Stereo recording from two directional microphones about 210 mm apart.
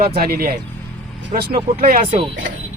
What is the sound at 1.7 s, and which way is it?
Speech, 30° right (ahead or behind).